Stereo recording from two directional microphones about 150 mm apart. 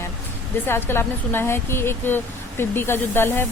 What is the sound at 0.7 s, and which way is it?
Speech, 15° left (ahead or behind).